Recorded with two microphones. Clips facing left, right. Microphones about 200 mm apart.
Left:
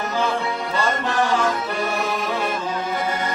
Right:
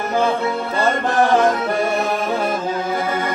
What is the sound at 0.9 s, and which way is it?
Music, 50° right (ahead or behind).